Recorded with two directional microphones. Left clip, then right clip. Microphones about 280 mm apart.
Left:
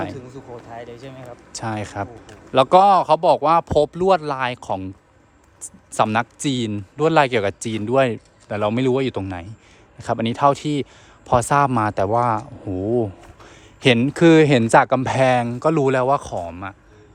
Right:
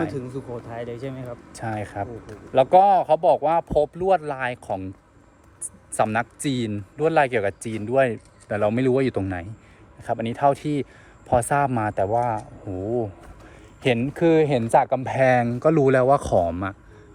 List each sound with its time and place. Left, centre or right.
0.1 s speech: right
1.5 s a man's voice: centre
6.0 s a man's voice: centre
12.6 s speech: left
13.8 s a man's voice: centre